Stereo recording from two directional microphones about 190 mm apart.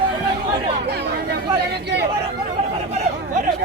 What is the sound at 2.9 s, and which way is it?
Chatter, 35° right (ahead or behind).